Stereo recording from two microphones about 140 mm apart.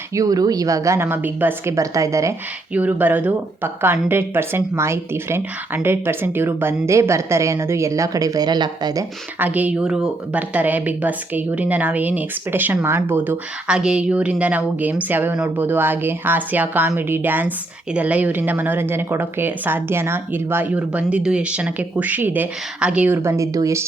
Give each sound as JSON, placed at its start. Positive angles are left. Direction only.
{"t": 0.1, "sound": "speech", "side_deg": -25}
{"t": 2.7, "sound": "speech", "side_deg": -10}
{"t": 9.4, "sound": "speech", "side_deg": -10}